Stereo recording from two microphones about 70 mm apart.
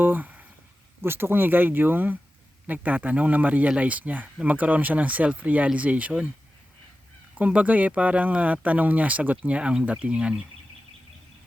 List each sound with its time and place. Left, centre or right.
0.0 s a sound: right
1.0 s speech: right; by 6.3 s centre
7.3 s speech: right